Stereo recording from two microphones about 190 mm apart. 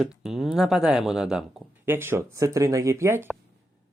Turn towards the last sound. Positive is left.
turn(degrees=-10)  # may be behind; listen again after turning